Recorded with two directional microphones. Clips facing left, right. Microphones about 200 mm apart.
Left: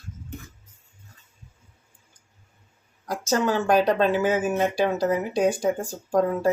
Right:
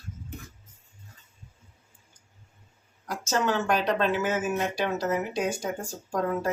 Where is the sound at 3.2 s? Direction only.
35° left (ahead or behind).